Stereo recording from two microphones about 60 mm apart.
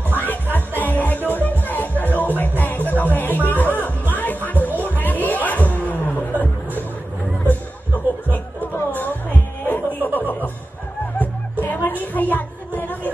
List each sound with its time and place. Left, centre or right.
0.1 s music: left
9.7 s music: left